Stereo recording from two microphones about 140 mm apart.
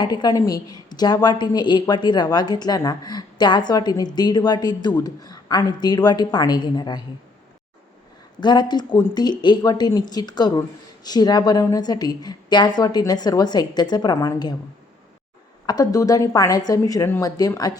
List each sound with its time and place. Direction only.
0.0 s speech: 30° left (ahead or behind)
8.4 s speech: 30° left (ahead or behind)
15.6 s speech: 25° left (ahead or behind)